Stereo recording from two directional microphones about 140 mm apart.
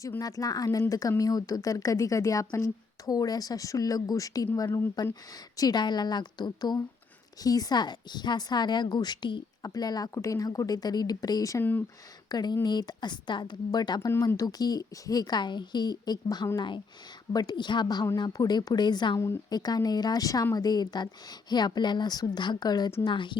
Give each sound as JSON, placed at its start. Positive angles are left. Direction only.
{"t": 0.0, "sound": "a woman's voice", "side_deg": 25}
{"t": 5.5, "sound": "a woman's voice", "side_deg": 30}